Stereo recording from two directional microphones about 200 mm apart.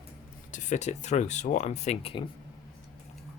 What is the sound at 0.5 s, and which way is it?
Speech, 35° left (ahead or behind).